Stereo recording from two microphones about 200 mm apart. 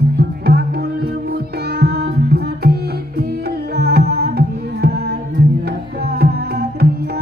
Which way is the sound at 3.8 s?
50° right (ahead or behind).